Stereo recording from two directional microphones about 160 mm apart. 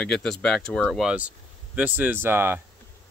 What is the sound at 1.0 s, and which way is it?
Speech, 10° right (ahead or behind).